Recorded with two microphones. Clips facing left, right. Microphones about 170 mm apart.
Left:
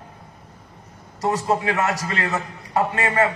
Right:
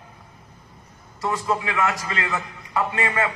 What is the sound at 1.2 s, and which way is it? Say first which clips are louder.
A man's voice: left 3 dB; 40° left (ahead or behind).